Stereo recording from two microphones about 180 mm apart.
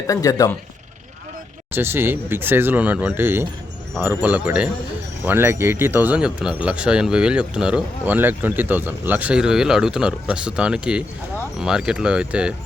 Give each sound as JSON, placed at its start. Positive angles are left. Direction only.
{"t": 0.1, "sound": "speech", "side_deg": 20}
{"t": 1.7, "sound": "speech", "side_deg": -10}